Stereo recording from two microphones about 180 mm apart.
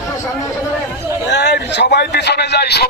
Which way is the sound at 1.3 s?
70° left (ahead or behind).